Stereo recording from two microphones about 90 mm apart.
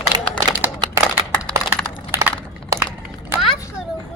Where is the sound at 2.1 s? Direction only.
30° right (ahead or behind).